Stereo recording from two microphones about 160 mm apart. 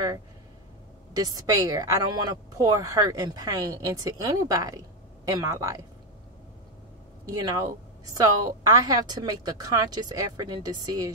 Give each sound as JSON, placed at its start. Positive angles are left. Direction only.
{"t": 1.1, "sound": "speech", "side_deg": -25}
{"t": 7.2, "sound": "speech", "side_deg": -20}